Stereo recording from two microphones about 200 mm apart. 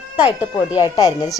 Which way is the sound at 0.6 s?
10° right (ahead or behind).